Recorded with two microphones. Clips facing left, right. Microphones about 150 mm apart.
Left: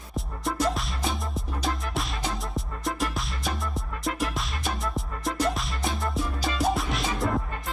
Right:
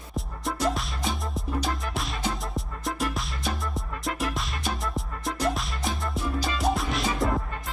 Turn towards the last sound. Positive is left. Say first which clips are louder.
# even
turn(degrees=0)  # may be behind; listen again after turning